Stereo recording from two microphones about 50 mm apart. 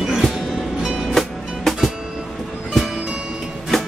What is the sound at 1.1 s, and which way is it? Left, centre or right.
Music, centre.